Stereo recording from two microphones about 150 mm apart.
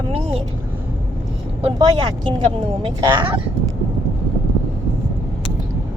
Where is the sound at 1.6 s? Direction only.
30° right (ahead or behind).